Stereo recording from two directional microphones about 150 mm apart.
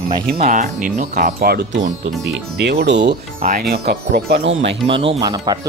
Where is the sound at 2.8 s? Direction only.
90° right; by 3.6 s 65° right (ahead or behind).